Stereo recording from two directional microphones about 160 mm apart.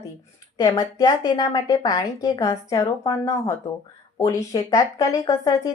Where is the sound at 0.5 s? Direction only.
25° left (ahead or behind).